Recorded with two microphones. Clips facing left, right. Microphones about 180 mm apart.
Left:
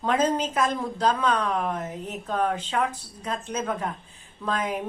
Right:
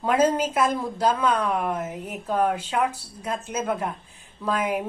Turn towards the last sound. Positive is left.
turn(degrees=-10)  # may be behind; listen again after turning